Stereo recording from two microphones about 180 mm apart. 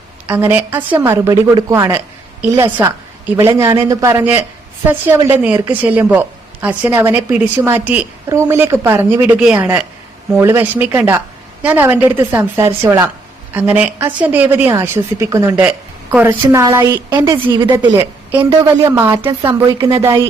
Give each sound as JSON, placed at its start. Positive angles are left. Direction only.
{"t": 0.3, "sound": "a woman's voice", "side_deg": -10}